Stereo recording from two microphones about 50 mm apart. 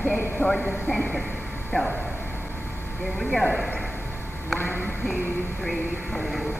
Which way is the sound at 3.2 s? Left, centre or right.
Centre.